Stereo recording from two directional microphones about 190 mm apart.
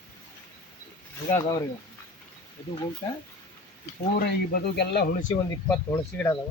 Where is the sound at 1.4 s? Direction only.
20° left (ahead or behind).